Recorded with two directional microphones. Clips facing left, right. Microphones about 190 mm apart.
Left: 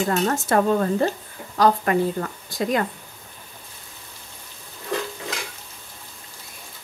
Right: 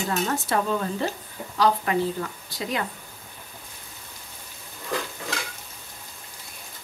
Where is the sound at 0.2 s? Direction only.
50° left (ahead or behind).